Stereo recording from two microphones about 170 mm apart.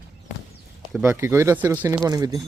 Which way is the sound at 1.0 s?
15° right (ahead or behind).